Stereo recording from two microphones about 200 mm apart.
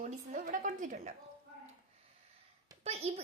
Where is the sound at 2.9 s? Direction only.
30° right (ahead or behind).